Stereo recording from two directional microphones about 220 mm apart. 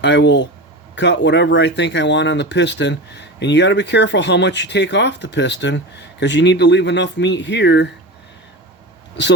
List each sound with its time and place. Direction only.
0.0 s speech: 55° left (ahead or behind)